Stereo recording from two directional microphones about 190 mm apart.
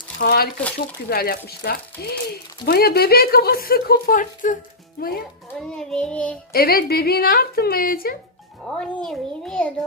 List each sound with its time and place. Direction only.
0.2 s a woman's voice: 55° left (ahead or behind)
5.5 s a child's voice: 5° left (ahead or behind)
6.5 s a woman's voice: 55° left (ahead or behind)
8.8 s a child's voice: 5° left (ahead or behind)